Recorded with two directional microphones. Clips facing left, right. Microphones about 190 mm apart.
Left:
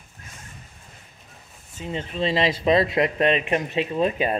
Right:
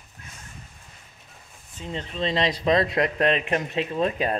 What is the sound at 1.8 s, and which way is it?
Speech, 5° left (ahead or behind).